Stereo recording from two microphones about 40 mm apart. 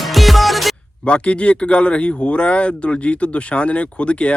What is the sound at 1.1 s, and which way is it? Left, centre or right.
Speech, left.